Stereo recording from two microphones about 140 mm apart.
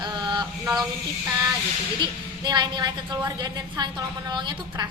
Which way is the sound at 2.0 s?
35° right (ahead or behind).